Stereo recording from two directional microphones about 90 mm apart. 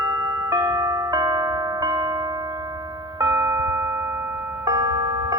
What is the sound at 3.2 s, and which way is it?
Music, 35° right (ahead or behind).